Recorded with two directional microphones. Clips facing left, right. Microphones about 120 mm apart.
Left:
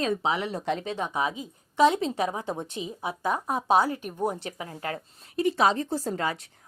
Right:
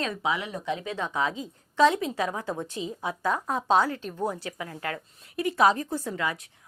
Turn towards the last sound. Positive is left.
turn(degrees=35)  # may be behind; listen again after turning